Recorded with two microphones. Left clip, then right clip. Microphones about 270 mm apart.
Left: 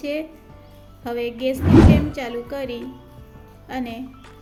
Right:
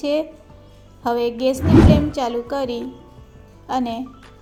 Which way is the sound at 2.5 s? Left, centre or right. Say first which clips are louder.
Right 5 dB; centre.